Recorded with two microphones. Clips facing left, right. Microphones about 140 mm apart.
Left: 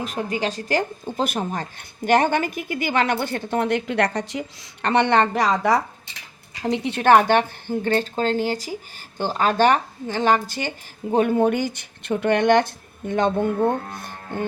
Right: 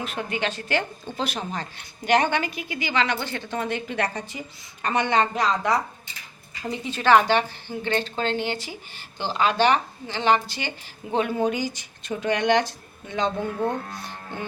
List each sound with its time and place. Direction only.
0.0 s a woman's voice: 35° left (ahead or behind)
1.1 s a woman's voice: 50° left (ahead or behind)
6.1 s a woman's voice: 75° left (ahead or behind); by 14.5 s 50° left (ahead or behind)